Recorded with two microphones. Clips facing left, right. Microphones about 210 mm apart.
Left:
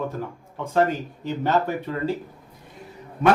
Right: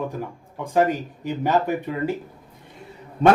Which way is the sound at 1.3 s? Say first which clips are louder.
Right 1 dB; 15° right (ahead or behind).